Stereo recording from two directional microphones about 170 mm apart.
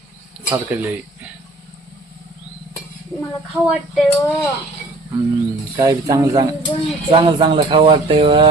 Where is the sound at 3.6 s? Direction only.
5° right (ahead or behind).